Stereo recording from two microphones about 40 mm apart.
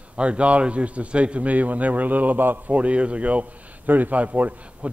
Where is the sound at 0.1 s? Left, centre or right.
Right.